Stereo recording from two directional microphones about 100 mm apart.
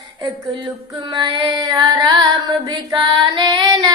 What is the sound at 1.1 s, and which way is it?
Child singing, 45° right (ahead or behind).